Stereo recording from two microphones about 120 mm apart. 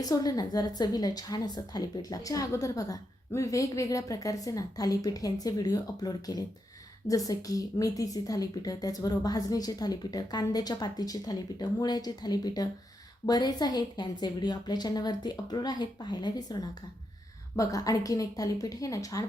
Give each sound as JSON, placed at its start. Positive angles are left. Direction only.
{"t": 0.0, "sound": "a woman's voice", "side_deg": 30}